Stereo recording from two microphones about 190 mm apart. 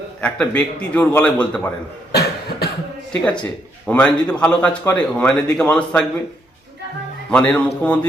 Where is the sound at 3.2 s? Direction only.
5° left (ahead or behind).